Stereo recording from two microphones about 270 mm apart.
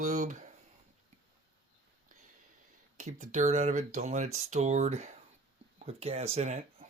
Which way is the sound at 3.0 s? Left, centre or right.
Right.